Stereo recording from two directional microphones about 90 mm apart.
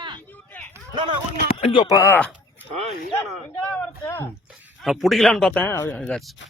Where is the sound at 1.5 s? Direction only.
90° left.